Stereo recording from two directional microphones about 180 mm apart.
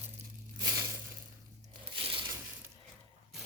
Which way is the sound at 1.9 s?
30° right (ahead or behind).